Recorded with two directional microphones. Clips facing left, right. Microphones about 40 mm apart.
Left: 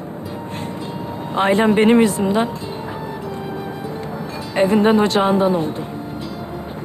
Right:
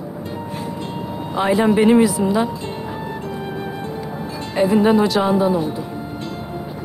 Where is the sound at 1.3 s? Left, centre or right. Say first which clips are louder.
Left 1 dB; left.